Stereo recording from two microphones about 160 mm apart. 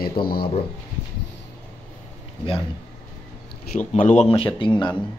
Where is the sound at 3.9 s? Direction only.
45° left (ahead or behind).